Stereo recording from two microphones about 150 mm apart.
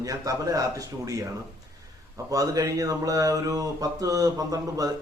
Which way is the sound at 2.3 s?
25° right (ahead or behind).